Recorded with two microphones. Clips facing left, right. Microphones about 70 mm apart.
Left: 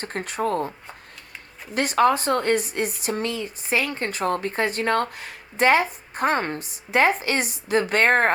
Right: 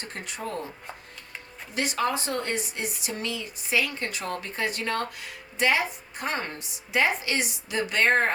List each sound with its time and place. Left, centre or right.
0.0 s speech: left
1.7 s speech: left